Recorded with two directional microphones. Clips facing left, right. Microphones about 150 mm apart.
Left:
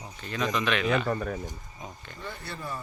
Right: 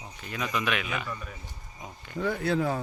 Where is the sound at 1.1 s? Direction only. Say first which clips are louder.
Left 9 dB; 55° left (ahead or behind).